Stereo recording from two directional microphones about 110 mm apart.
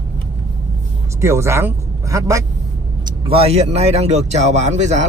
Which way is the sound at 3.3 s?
70° right (ahead or behind).